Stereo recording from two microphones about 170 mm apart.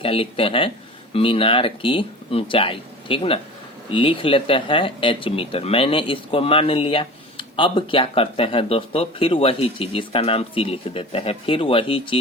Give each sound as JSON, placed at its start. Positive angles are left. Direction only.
{"t": 0.0, "sound": "speech", "side_deg": 35}